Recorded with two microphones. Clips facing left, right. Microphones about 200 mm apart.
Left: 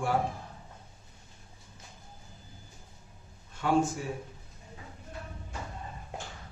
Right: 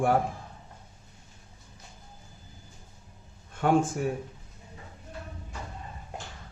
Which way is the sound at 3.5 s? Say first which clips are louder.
Right 3 dB; 55° right (ahead or behind).